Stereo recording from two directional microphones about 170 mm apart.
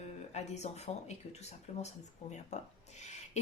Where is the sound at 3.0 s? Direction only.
40° left (ahead or behind).